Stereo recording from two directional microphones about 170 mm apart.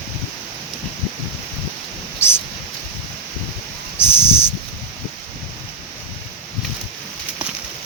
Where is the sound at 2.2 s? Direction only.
15° left (ahead or behind).